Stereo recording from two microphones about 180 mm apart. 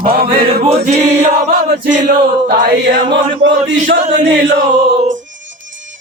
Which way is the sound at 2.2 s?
60° right (ahead or behind).